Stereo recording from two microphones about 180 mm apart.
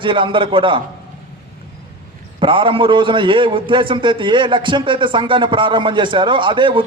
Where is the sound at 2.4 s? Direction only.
30° right (ahead or behind).